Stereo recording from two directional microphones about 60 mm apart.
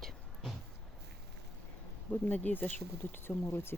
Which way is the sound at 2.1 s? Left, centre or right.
Left.